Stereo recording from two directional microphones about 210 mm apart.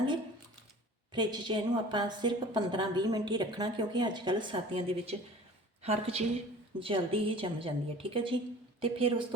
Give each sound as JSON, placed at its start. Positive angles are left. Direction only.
{"t": 1.1, "sound": "a woman's voice", "side_deg": -20}